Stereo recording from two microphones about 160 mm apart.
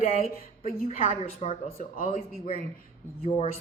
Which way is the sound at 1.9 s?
55° left (ahead or behind).